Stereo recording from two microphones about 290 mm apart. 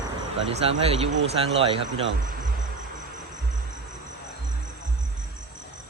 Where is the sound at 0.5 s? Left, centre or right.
Right.